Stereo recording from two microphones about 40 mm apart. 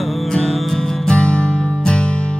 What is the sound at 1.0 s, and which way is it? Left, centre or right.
Music, left.